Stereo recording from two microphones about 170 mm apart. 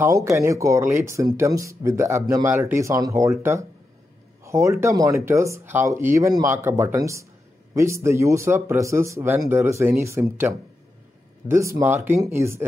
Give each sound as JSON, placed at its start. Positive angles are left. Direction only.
{"t": 0.0, "sound": "speech", "side_deg": -15}